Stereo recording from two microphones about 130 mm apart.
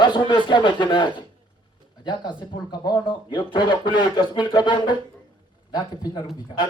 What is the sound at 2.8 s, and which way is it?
Speech, 35° left (ahead or behind).